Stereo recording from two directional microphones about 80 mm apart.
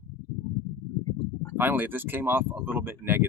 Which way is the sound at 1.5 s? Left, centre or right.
Right.